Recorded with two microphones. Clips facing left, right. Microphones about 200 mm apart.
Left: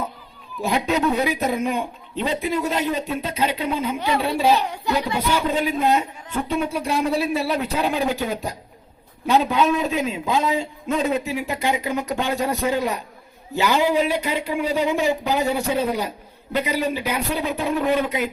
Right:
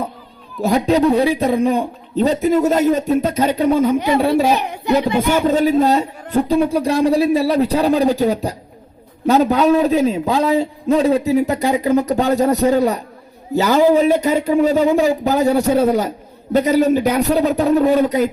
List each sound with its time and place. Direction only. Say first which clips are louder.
0.6 s a man's voice: right 7 dB; 35° right (ahead or behind)
4.4 s a child's voice: right 3 dB; 20° right (ahead or behind)
5.5 s a man's voice: right 7 dB; 45° right (ahead or behind)